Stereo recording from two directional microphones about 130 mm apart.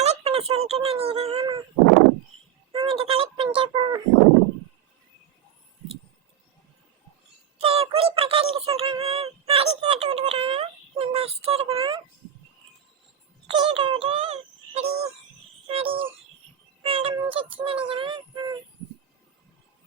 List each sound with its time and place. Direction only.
0.0 s speech: 55° right (ahead or behind)
2.7 s a sound: 45° right (ahead or behind)
7.6 s speech: 45° right (ahead or behind)
13.5 s speech: 40° right (ahead or behind)
15.6 s a sound: 45° right (ahead or behind)
16.8 s vehicle: 45° right (ahead or behind)
17.2 s speech: 40° right (ahead or behind)
17.8 s child singing: 40° right (ahead or behind)